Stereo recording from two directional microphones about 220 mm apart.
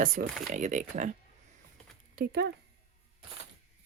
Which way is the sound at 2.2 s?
45° right (ahead or behind).